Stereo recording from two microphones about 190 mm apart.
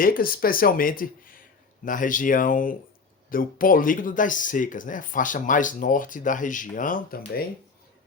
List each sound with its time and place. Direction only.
0.0 s speech: 50° left (ahead or behind)